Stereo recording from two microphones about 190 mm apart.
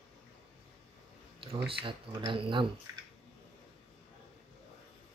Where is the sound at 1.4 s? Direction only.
30° right (ahead or behind).